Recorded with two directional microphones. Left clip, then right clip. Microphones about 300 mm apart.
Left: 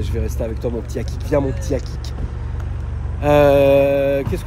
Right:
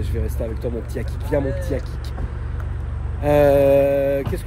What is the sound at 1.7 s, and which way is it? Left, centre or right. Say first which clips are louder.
Speech: left 6 dB; centre.